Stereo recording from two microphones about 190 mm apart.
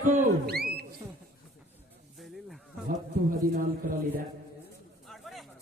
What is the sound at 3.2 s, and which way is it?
Speech, 45° right (ahead or behind).